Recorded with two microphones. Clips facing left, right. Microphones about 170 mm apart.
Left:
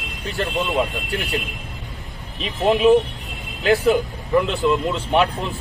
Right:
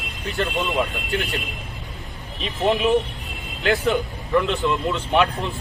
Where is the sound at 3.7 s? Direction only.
40° left (ahead or behind).